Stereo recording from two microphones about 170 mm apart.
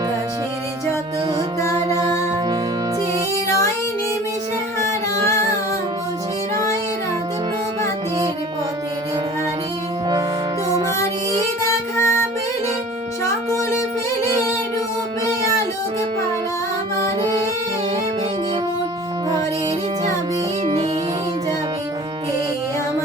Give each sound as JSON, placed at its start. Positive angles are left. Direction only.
{"t": 11.6, "sound": "music", "side_deg": 15}
{"t": 13.5, "sound": "music", "side_deg": 15}